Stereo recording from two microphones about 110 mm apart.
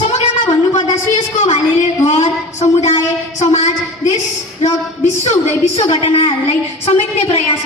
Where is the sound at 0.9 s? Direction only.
85° left.